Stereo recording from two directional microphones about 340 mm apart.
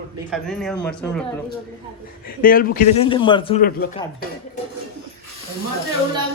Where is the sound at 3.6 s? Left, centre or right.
Left.